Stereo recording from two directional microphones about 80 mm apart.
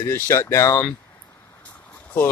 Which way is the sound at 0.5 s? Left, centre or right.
Left.